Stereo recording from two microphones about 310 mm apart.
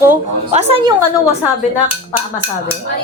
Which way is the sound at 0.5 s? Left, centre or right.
Right.